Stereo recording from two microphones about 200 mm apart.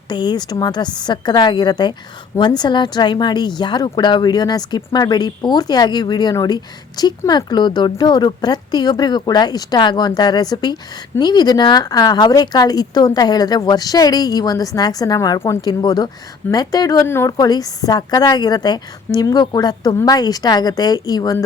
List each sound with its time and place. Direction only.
0.1 s a woman's voice: 20° left (ahead or behind)